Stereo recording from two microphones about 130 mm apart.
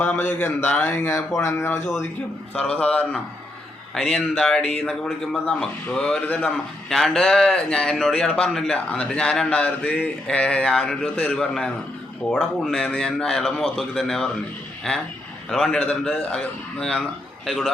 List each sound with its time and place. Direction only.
0.0 s speech: 15° left (ahead or behind)